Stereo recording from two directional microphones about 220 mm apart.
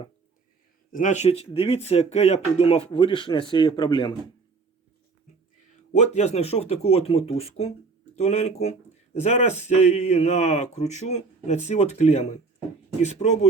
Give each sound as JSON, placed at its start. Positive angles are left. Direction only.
{"t": 0.9, "sound": "speech", "side_deg": 35}
{"t": 5.9, "sound": "speech", "side_deg": 30}